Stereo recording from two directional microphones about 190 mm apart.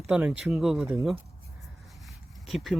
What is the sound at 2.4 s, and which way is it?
Speech, centre (ahead or behind).